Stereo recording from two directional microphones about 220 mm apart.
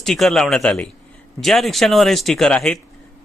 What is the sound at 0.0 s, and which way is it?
A man's voice, centre (ahead or behind).